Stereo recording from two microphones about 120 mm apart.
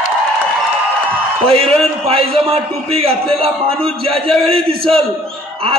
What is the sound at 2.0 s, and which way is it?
A man's voice, 55° right (ahead or behind).